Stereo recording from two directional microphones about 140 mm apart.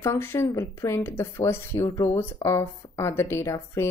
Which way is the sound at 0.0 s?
15° left (ahead or behind).